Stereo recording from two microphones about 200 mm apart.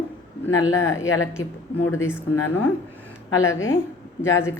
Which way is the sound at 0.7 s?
15° left (ahead or behind).